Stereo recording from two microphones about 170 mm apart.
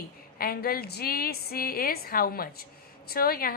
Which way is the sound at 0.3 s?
60° left (ahead or behind).